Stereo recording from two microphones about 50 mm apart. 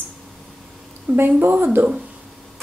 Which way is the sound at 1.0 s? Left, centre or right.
Right.